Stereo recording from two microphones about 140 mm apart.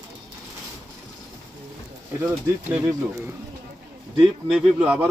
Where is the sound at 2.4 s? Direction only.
15° right (ahead or behind).